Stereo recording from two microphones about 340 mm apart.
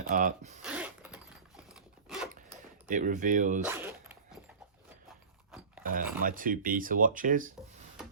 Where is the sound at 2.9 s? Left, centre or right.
Right.